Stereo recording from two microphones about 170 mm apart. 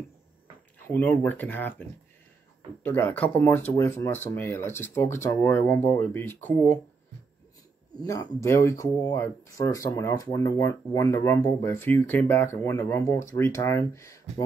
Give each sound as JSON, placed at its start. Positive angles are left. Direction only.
{"t": 0.7, "sound": "speech", "side_deg": 10}
{"t": 8.1, "sound": "speech", "side_deg": 15}